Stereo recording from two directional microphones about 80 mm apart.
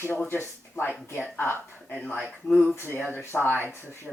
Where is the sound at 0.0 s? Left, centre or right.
Left.